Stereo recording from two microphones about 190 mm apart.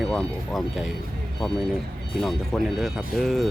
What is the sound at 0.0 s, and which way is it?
Speech, 5° left (ahead or behind).